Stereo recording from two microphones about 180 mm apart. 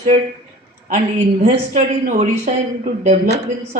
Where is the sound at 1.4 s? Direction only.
40° right (ahead or behind).